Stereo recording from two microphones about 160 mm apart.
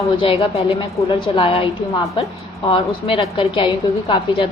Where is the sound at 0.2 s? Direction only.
35° left (ahead or behind).